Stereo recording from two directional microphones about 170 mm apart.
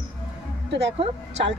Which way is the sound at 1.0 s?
35° right (ahead or behind).